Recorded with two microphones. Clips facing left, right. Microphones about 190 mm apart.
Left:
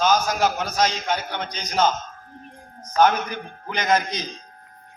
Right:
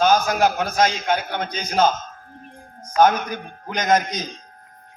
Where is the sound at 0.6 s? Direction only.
55° right (ahead or behind).